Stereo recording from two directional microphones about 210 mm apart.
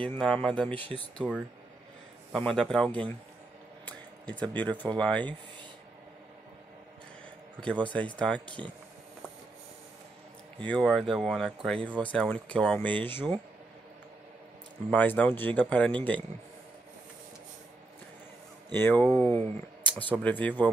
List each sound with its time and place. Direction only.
0.0 s speech: 5° left (ahead or behind)
1.1 s speech: 5° right (ahead or behind)
7.8 s speech: 5° left (ahead or behind)
10.6 s speech: 5° left (ahead or behind)
14.9 s speech: 5° left (ahead or behind)
18.7 s speech: 10° left (ahead or behind)